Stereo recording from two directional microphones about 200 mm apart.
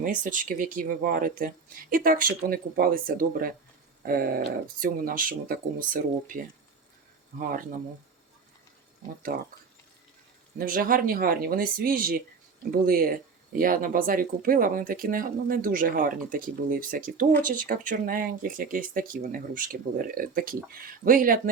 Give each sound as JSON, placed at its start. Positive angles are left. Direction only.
{"t": 0.0, "sound": "speech", "side_deg": -40}
{"t": 9.3, "sound": "speech", "side_deg": -45}
{"t": 10.6, "sound": "speech", "side_deg": -45}